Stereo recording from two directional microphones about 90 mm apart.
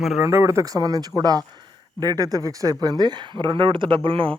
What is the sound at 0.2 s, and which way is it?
Speech, 30° right (ahead or behind).